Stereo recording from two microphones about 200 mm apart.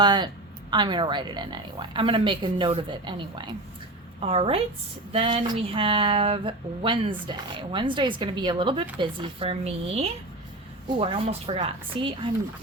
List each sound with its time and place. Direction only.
0.0 s speech: 20° right (ahead or behind)